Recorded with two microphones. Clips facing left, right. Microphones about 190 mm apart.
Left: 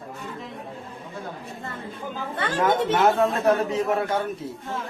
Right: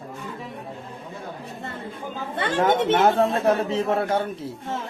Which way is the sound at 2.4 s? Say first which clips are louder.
Right 2 dB; 25° right (ahead or behind).